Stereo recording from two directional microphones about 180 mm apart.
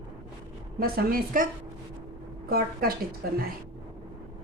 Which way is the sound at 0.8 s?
55° right (ahead or behind).